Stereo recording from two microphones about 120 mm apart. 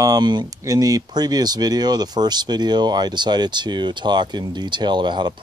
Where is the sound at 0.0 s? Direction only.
35° right (ahead or behind).